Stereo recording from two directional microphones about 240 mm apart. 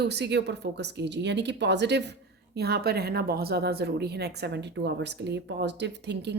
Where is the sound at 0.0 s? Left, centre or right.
Right.